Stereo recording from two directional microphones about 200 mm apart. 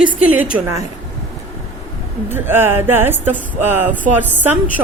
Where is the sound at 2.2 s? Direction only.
10° right (ahead or behind).